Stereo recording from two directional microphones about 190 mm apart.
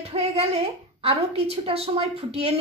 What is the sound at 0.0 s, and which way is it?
A woman's voice, 35° right (ahead or behind).